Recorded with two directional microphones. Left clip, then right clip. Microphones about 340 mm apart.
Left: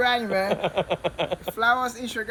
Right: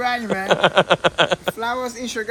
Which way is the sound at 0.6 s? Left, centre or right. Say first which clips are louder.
Right 10 dB; right.